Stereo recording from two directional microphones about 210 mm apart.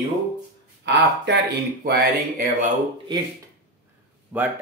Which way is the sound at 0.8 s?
55° right (ahead or behind).